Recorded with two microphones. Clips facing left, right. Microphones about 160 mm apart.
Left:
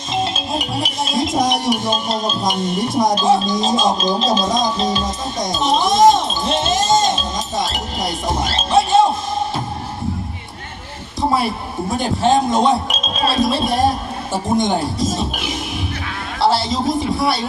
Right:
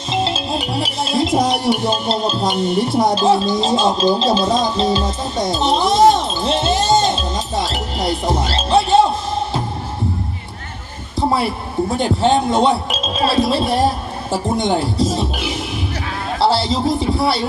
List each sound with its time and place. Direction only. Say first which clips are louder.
0.3 s speech: right 2 dB; 30° right (ahead or behind)
6.1 s music: even; 30° right (ahead or behind)
11.9 s speech: left 1 dB; 30° right (ahead or behind)
16.4 s a sound: right 1 dB; 30° right (ahead or behind)